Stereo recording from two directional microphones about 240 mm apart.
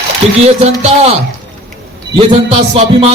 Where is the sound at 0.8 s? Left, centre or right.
Right.